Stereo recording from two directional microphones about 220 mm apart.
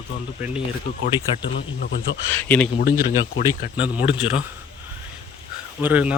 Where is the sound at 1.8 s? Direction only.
45° left (ahead or behind).